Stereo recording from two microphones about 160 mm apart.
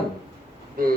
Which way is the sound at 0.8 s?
60° right (ahead or behind).